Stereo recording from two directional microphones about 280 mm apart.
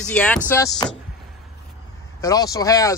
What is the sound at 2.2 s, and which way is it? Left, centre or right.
Speech, centre.